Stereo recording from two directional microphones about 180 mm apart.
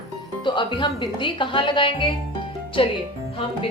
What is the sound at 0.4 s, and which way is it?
A man's voice, 25° left (ahead or behind).